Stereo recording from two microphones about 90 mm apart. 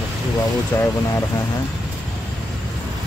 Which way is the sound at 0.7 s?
25° left (ahead or behind).